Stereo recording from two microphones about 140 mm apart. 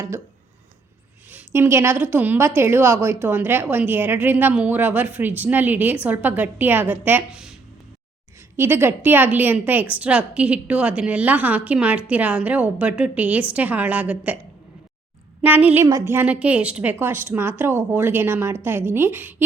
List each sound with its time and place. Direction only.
1.3 s a woman's voice: 15° right (ahead or behind)
8.4 s a woman's voice: 15° right (ahead or behind)
15.4 s a woman's voice: 10° right (ahead or behind)